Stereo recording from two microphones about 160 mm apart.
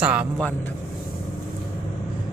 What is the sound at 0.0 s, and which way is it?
Speech, 10° right (ahead or behind).